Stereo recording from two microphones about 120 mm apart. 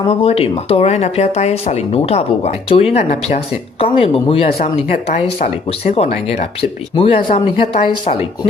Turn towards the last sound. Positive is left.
turn(degrees=45)  # may be behind; listen again after turning